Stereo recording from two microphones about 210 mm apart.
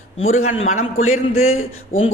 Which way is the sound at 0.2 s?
75° left (ahead or behind).